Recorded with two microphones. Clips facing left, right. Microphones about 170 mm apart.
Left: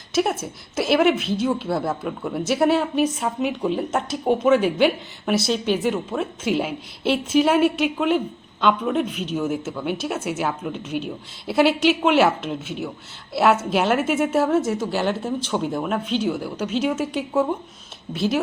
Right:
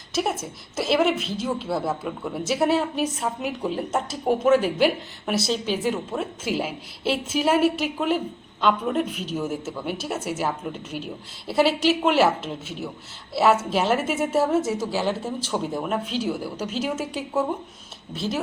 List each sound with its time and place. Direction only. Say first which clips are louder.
0.1 s a woman's voice: left 4 dB; centre (ahead or behind)